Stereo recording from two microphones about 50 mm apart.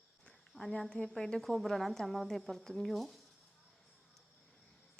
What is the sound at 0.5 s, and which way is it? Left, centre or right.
Speech, left.